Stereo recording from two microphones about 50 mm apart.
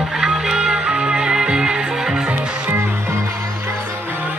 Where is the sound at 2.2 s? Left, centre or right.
Right.